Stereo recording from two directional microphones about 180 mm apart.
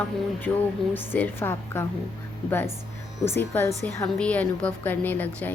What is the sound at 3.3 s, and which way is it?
Speech, 15° left (ahead or behind).